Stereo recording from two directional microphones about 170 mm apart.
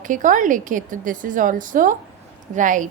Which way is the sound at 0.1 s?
50° right (ahead or behind).